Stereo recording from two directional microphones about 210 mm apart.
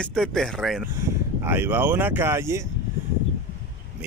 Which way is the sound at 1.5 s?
10° right (ahead or behind).